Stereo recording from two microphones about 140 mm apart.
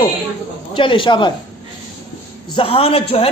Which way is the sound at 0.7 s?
35° left (ahead or behind).